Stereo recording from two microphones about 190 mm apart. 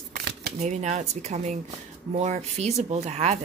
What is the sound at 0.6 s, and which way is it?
Speech, 35° right (ahead or behind).